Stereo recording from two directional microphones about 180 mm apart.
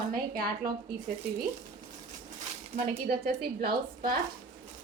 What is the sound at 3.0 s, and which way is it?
A woman's voice, 60° right (ahead or behind).